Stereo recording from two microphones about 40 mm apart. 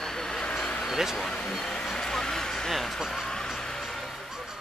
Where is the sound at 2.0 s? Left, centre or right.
Centre.